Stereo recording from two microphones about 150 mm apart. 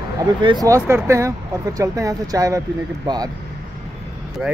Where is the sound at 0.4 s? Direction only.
35° right (ahead or behind).